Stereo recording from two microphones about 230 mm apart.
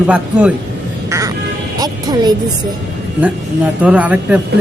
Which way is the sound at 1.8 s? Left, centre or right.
Centre.